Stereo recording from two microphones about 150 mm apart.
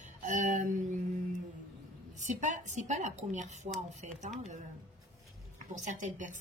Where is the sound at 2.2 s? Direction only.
55° right (ahead or behind).